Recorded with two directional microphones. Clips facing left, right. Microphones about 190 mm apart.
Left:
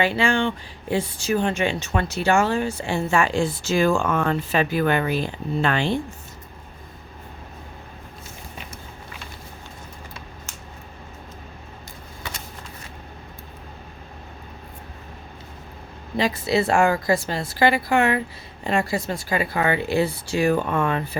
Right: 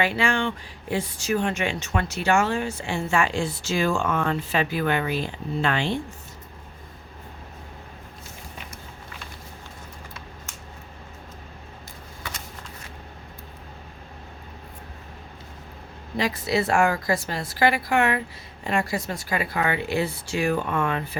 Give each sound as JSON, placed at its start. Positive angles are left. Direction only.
{"t": 0.0, "sound": "speech", "side_deg": 30}
{"t": 16.1, "sound": "speech", "side_deg": 25}